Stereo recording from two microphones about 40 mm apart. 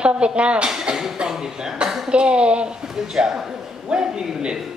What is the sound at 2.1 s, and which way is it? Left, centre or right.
Speech, right.